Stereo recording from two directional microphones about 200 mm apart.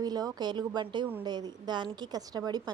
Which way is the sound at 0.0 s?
20° right (ahead or behind).